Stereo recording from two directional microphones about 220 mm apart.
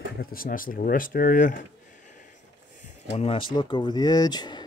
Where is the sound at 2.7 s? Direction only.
30° left (ahead or behind).